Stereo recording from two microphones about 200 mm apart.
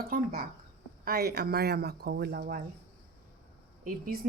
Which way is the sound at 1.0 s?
50° right (ahead or behind).